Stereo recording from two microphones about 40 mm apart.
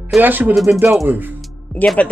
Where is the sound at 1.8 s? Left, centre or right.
Left.